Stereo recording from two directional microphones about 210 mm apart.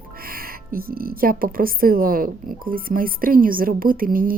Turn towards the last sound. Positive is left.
turn(degrees=-40)  # may be behind; listen again after turning